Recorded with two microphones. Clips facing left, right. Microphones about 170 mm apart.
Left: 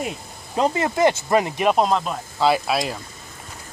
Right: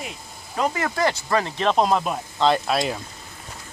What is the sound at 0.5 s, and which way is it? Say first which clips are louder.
Speech: left 4 dB; 25° left (ahead or behind).